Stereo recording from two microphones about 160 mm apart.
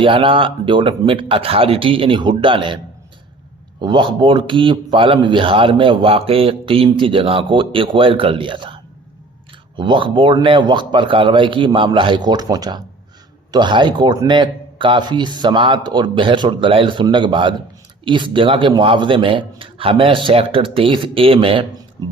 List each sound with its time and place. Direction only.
0.0 s speech: 35° right (ahead or behind)
3.8 s a man's voice: 30° right (ahead or behind)